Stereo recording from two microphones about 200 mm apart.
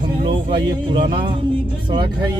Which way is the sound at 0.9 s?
25° right (ahead or behind).